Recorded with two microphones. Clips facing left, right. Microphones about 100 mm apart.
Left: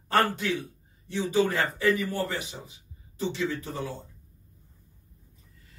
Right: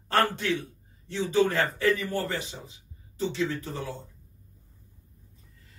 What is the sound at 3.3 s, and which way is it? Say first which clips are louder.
Speech: even; 25° left (ahead or behind).